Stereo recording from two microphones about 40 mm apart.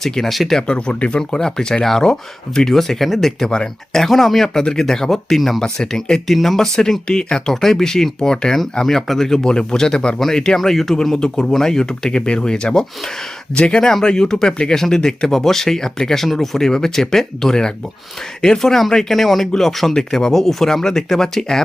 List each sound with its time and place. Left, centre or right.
0.0 s speech: centre
0.3 s speech: centre
0.7 s speech: left; by 3.3 s centre
3.4 s speech: centre
4.4 s speech: centre